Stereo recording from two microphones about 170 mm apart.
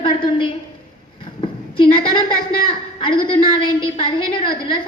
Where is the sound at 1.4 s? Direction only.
30° left (ahead or behind).